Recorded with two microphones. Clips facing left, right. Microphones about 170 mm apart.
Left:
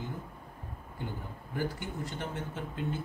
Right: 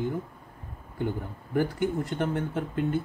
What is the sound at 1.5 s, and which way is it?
Speech, 55° right (ahead or behind).